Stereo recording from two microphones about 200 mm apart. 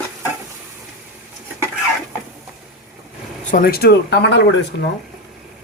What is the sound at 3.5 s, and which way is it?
Speech, 50° left (ahead or behind).